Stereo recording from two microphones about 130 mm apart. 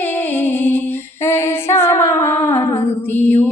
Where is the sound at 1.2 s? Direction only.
20° left (ahead or behind).